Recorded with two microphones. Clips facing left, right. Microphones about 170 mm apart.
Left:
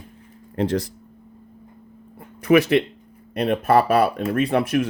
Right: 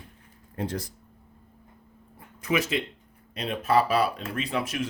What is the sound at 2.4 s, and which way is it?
Speech, 65° left (ahead or behind).